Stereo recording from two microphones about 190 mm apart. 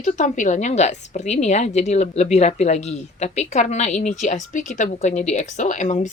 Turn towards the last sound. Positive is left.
turn(degrees=40)  # may be behind; listen again after turning